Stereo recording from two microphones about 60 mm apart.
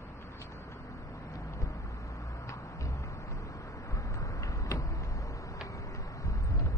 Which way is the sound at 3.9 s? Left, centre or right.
Left.